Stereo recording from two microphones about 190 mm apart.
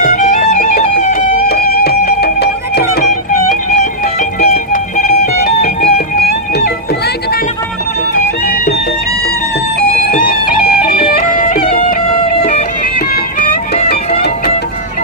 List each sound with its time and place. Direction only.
0.0 s music: 40° left (ahead or behind); by 3.1 s 55° left (ahead or behind)
4.4 s music: 45° left (ahead or behind)
10.1 s music: 50° left (ahead or behind)